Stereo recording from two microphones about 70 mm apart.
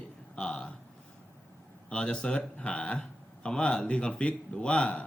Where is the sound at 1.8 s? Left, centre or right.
Centre.